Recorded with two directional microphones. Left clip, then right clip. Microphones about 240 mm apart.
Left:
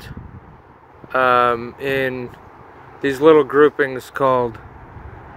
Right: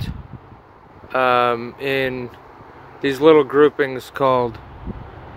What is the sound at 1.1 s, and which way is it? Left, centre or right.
Speech, centre.